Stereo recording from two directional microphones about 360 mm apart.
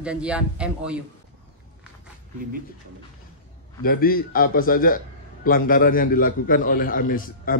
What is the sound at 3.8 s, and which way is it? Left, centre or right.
A man's voice, left.